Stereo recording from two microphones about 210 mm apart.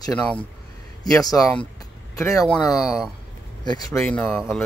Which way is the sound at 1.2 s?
15° left (ahead or behind).